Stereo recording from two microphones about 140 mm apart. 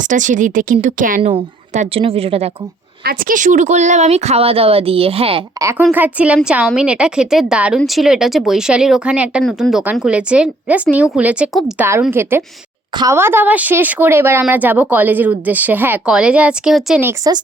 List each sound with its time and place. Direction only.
0.0 s a woman's voice: 65° right (ahead or behind)
1.7 s a woman's voice: 50° right (ahead or behind)
3.1 s a woman's voice: 85° right; by 5.4 s 40° right (ahead or behind)
5.5 s speech: 20° right (ahead or behind)
5.9 s a woman's voice: 10° right (ahead or behind)
17.1 s speech: 25° right (ahead or behind)